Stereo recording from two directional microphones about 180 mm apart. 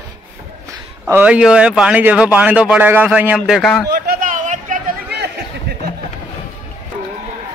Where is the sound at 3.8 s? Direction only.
60° right (ahead or behind).